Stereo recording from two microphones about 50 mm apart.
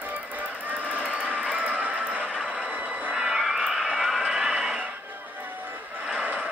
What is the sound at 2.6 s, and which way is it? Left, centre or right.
Vehicle, right.